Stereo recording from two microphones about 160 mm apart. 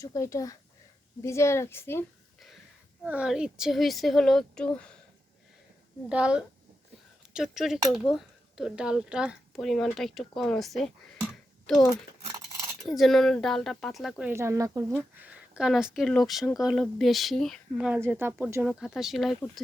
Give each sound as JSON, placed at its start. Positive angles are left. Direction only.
{"t": 0.0, "sound": "a woman's voice", "side_deg": 20}
{"t": 3.0, "sound": "a woman's voice", "side_deg": -5}
{"t": 6.1, "sound": "a woman's voice", "side_deg": -5}
{"t": 14.3, "sound": "a woman's voice", "side_deg": -15}